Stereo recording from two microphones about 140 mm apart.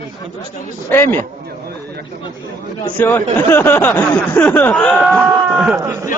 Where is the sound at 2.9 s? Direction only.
15° left (ahead or behind).